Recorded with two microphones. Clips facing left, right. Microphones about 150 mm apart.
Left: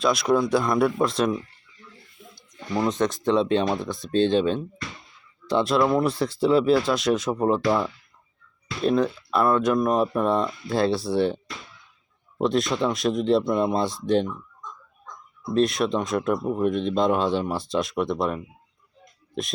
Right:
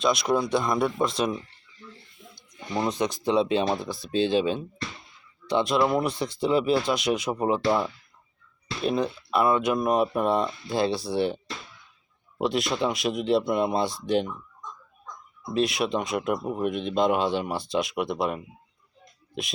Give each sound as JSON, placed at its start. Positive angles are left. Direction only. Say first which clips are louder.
{"t": 0.0, "sound": "speech", "louder": "left 3 dB", "side_deg": 0}
{"t": 2.6, "sound": "speech", "louder": "left 3 dB", "side_deg": -20}
{"t": 2.9, "sound": "speech", "louder": "left 1 dB", "side_deg": -5}
{"t": 8.8, "sound": "speech", "louder": "left 4 dB", "side_deg": 0}
{"t": 10.1, "sound": "speech", "louder": "left 2 dB", "side_deg": -15}
{"t": 10.7, "sound": "speech", "louder": "left 5 dB", "side_deg": 0}
{"t": 12.4, "sound": "speech", "louder": "left 3 dB", "side_deg": -5}
{"t": 14.3, "sound": "a sound", "louder": "left 3 dB", "side_deg": -15}
{"t": 15.5, "sound": "speech", "louder": "left 3 dB", "side_deg": -5}